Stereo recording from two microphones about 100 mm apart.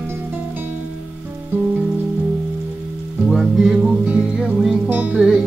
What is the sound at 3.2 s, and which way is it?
Music, 5° right (ahead or behind).